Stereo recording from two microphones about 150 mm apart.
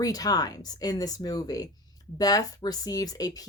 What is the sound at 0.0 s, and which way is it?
Speech, 25° left (ahead or behind).